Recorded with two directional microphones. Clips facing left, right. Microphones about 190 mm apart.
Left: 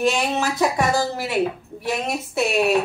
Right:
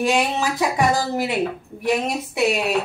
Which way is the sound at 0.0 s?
15° right (ahead or behind).